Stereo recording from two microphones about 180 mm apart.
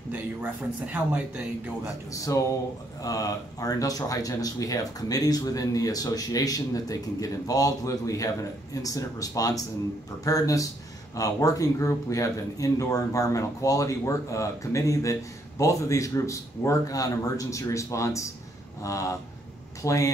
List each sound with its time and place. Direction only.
0.9 s speech: 10° right (ahead or behind)
2.1 s speech: 20° left (ahead or behind)